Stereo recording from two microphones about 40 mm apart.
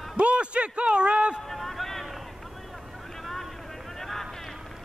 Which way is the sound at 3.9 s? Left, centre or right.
Centre.